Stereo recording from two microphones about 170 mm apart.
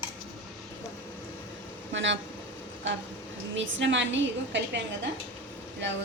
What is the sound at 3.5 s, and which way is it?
A woman's voice, 90° right.